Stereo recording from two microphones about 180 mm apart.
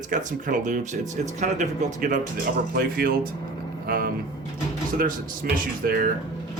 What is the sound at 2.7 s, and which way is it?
Speech, 55° right (ahead or behind).